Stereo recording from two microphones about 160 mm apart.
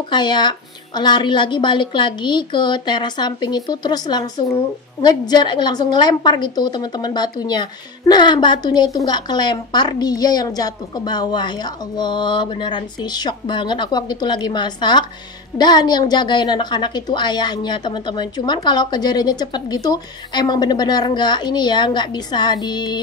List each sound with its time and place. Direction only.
0.1 s a woman's voice: 30° left (ahead or behind)